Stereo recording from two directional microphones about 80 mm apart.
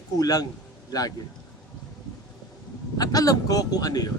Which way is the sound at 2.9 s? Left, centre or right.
Left.